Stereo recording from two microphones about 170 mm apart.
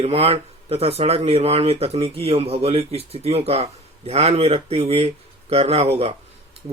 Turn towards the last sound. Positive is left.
turn(degrees=-35)  # may be behind; listen again after turning